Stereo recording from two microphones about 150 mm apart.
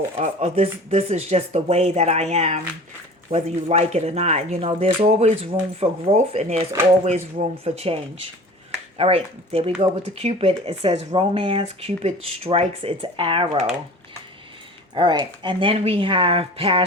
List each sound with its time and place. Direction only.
0.2 s speech: 45° right (ahead or behind)
14.9 s speech: 30° right (ahead or behind)